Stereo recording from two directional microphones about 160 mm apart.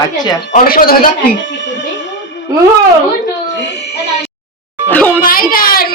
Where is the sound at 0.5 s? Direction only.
65° left (ahead or behind).